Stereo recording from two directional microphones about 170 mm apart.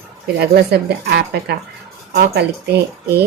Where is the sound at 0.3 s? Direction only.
75° right (ahead or behind).